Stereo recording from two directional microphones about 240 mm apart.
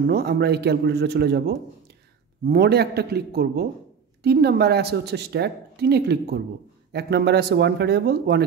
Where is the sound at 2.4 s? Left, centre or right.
Right.